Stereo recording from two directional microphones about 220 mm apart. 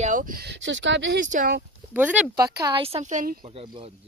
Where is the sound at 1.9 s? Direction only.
5° right (ahead or behind).